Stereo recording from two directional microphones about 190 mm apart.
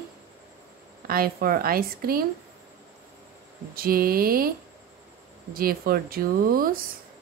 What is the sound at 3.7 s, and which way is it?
Speech, 50° right (ahead or behind).